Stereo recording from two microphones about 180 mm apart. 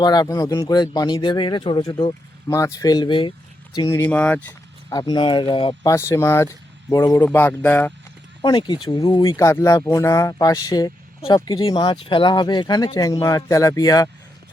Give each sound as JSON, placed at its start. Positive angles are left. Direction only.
{"t": 0.0, "sound": "speech", "side_deg": 20}
{"t": 3.8, "sound": "speech", "side_deg": 15}
{"t": 4.9, "sound": "speech", "side_deg": 20}
{"t": 5.8, "sound": "speech", "side_deg": 15}
{"t": 8.4, "sound": "speech", "side_deg": 25}